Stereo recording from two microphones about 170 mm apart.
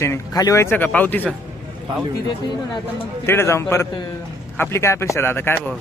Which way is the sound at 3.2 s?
15° left (ahead or behind).